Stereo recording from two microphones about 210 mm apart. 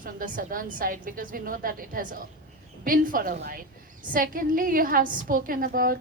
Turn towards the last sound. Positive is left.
turn(degrees=-45)  # may be behind; listen again after turning